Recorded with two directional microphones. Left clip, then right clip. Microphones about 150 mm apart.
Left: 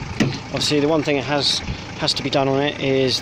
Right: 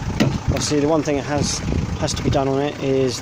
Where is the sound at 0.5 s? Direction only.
Centre (ahead or behind).